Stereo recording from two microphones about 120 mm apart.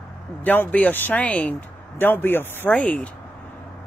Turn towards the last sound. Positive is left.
turn(degrees=10)  # may be behind; listen again after turning